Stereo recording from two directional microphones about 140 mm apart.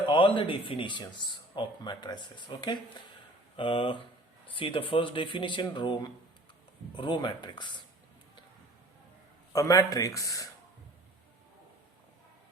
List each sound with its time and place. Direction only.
0.1 s speech: 40° left (ahead or behind)
9.5 s speech: 25° left (ahead or behind)